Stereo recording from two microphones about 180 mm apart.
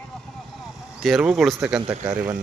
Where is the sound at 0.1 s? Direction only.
Centre (ahead or behind).